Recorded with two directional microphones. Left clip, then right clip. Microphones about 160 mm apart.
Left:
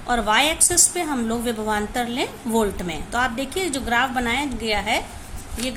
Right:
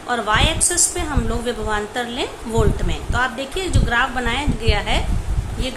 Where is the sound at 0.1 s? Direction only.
40° left (ahead or behind).